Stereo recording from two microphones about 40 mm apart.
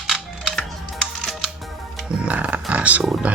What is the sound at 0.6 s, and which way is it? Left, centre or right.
Music, centre.